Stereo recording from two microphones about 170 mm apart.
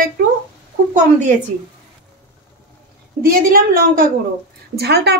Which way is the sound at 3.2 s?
60° right (ahead or behind).